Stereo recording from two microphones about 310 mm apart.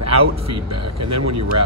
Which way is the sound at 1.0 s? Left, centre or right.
Right.